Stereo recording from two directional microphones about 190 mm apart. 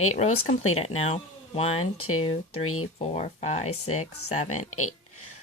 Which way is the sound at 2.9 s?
35° left (ahead or behind).